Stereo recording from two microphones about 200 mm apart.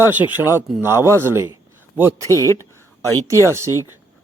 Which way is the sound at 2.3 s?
15° left (ahead or behind).